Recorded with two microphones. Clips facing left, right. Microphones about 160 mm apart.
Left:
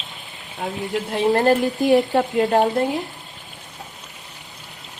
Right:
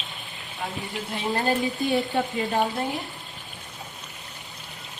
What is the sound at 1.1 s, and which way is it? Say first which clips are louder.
A woman's voice: left 8 dB; 75° left (ahead or behind).